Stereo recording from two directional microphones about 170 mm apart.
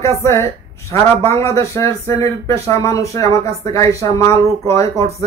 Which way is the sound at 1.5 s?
20° left (ahead or behind).